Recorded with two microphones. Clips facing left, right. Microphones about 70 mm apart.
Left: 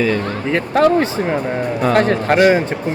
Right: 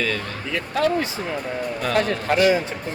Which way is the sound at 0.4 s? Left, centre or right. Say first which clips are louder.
Left 8 dB; left.